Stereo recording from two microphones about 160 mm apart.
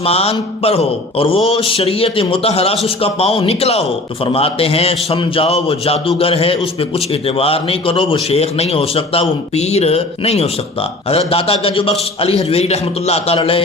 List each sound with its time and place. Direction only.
0.0 s speech: 40° left (ahead or behind)